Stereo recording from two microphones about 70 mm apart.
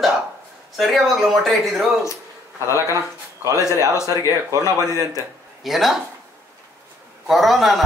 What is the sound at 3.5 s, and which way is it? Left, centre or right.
Speech, left.